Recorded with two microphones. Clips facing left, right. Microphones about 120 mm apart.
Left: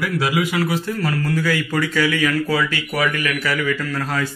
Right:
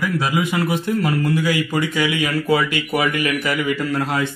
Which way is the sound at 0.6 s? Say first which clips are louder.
Right 2 dB; 20° right (ahead or behind).